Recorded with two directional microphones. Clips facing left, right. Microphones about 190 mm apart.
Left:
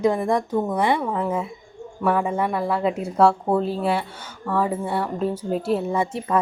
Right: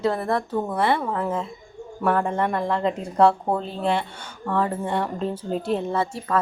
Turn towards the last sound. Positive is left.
turn(degrees=15)  # may be behind; listen again after turning